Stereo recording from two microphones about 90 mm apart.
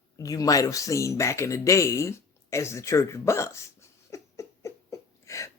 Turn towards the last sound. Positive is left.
turn(degrees=35)  # may be behind; listen again after turning